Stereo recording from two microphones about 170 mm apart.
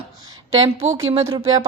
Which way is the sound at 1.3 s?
20° right (ahead or behind).